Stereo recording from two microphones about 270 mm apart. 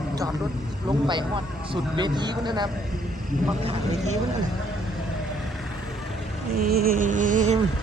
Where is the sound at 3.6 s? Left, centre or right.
Right.